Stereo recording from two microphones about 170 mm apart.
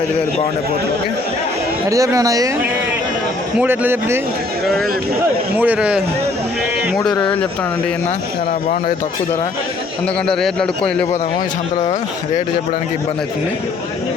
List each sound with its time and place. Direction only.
1.9 s speech: 20° right (ahead or behind)
3.6 s a man's voice: 10° right (ahead or behind)
5.5 s a man's voice: 10° right (ahead or behind)
6.9 s a man's voice: 5° left (ahead or behind)
10.2 s a man's voice: 5° left (ahead or behind)